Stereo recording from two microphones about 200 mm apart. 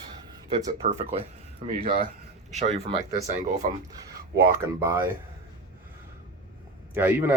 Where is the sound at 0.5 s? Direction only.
25° right (ahead or behind).